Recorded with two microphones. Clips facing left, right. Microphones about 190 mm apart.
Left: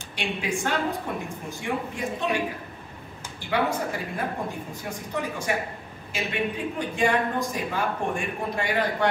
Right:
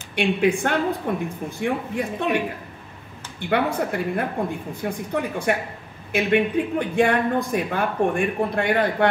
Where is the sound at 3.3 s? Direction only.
60° right (ahead or behind).